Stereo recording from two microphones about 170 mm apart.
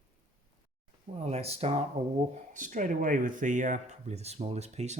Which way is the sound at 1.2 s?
40° right (ahead or behind).